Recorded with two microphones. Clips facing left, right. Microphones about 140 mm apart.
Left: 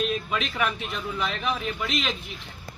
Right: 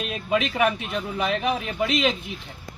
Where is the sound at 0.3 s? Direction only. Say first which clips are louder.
Right 6 dB; 45° right (ahead or behind).